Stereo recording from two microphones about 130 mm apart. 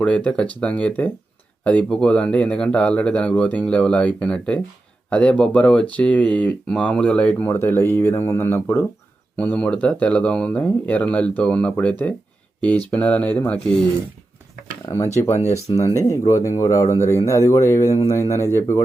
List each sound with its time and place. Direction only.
0.0 s speech: 10° left (ahead or behind)
15.7 s speech: 40° left (ahead or behind)
16.0 s speech: 25° left (ahead or behind)